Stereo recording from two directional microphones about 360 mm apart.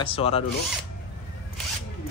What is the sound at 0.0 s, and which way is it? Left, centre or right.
Speech, centre.